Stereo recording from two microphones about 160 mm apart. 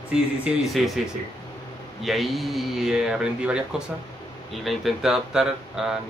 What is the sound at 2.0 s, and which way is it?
Speech, centre (ahead or behind).